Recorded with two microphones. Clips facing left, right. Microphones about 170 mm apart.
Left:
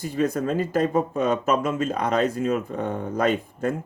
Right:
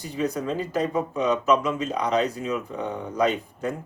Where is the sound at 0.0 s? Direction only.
50° left (ahead or behind).